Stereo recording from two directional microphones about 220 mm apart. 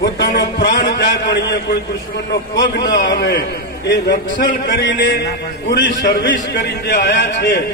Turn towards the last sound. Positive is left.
turn(degrees=50)  # may be behind; listen again after turning